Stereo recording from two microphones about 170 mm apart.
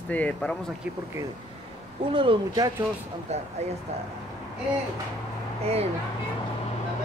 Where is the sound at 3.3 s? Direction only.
40° right (ahead or behind).